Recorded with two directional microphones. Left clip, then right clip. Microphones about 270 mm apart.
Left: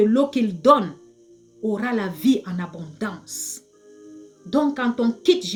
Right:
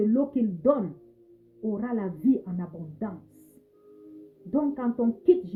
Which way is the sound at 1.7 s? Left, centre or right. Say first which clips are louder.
Left 7 dB; centre.